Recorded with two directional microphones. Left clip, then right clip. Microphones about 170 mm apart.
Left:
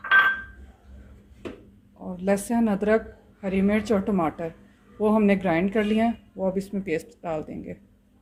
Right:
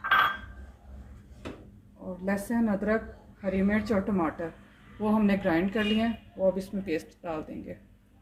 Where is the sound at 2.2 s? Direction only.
60° left (ahead or behind).